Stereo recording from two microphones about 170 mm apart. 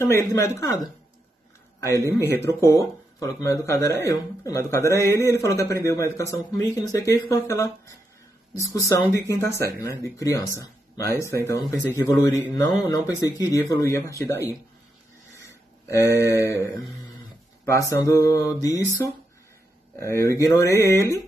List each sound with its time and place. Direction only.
0.0 s speech: 15° left (ahead or behind)
15.9 s speech: 20° left (ahead or behind)
17.6 s mantra: 20° left (ahead or behind)
20.0 s speech: 15° left (ahead or behind)